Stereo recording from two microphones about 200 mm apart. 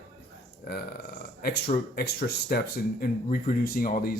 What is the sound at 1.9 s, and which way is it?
Speech, 50° left (ahead or behind).